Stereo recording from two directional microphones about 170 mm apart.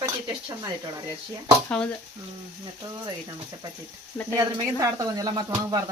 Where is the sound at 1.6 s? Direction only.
5° left (ahead or behind).